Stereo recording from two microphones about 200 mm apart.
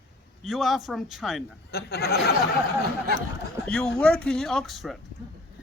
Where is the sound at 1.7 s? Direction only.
55° left (ahead or behind).